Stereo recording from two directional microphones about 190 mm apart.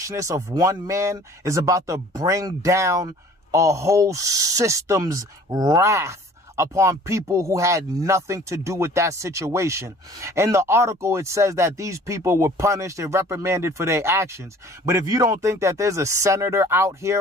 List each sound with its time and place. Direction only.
0.0 s speech: 15° right (ahead or behind)